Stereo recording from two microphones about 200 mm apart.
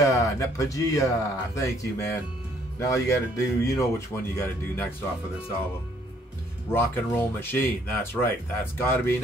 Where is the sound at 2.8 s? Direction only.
15° left (ahead or behind).